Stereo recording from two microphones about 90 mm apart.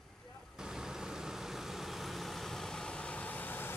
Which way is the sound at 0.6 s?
5° right (ahead or behind).